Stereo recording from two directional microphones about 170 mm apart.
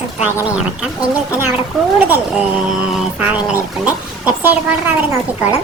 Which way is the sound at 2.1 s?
10° right (ahead or behind).